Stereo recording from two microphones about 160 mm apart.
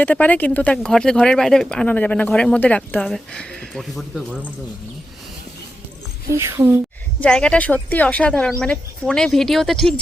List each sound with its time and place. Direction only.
0.0 s speech: 10° left (ahead or behind)
6.3 s speech: 15° right (ahead or behind)
7.2 s speech: 5° left (ahead or behind)